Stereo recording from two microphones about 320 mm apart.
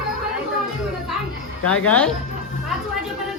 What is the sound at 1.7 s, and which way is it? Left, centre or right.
Speech, centre.